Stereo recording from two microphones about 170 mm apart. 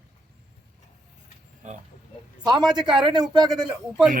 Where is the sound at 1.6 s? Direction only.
45° right (ahead or behind).